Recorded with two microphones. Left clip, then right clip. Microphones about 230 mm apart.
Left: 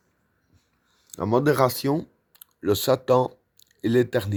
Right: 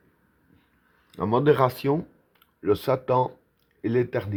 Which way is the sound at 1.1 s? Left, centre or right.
Left.